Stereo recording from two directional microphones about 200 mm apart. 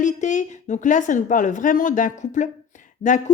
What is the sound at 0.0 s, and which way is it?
Speech, 40° left (ahead or behind).